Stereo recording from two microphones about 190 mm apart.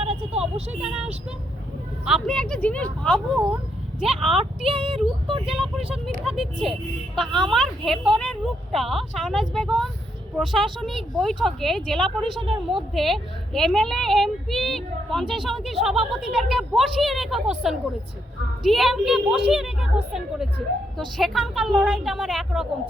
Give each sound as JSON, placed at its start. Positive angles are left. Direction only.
{"t": 0.0, "sound": "vehicle", "side_deg": -30}
{"t": 0.7, "sound": "speech", "side_deg": -5}
{"t": 4.6, "sound": "speech", "side_deg": -30}
{"t": 5.5, "sound": "speech", "side_deg": 0}
{"t": 12.4, "sound": "speech", "side_deg": -30}
{"t": 12.9, "sound": "speech", "side_deg": 0}
{"t": 21.2, "sound": "speech", "side_deg": 0}